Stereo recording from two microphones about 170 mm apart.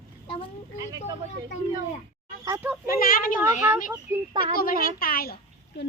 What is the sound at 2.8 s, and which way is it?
Speech, 60° left (ahead or behind).